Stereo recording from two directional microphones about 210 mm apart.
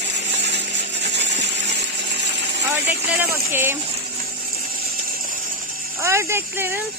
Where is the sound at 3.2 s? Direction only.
10° right (ahead or behind).